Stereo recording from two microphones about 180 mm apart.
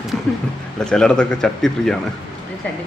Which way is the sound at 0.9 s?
5° left (ahead or behind).